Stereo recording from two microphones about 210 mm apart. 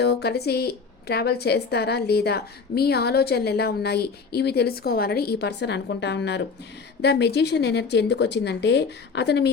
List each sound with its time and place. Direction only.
0.0 s speech: 50° left (ahead or behind)